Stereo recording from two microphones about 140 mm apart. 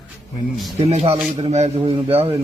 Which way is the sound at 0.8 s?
50° right (ahead or behind).